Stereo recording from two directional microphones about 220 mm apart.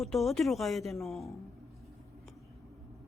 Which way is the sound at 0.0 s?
Centre (ahead or behind).